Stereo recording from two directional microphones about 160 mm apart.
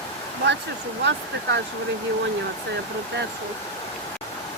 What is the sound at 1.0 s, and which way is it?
Speech, 90° right.